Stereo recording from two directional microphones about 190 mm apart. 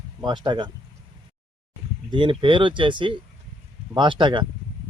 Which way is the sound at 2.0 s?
25° right (ahead or behind).